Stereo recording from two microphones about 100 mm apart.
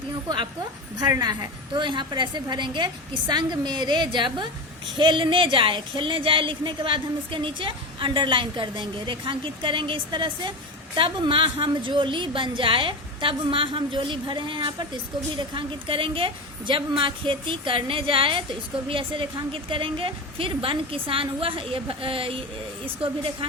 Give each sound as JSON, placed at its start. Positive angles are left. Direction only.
{"t": 1.2, "sound": "a woman's voice", "side_deg": -45}